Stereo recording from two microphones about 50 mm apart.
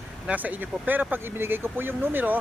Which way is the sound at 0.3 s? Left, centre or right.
Right.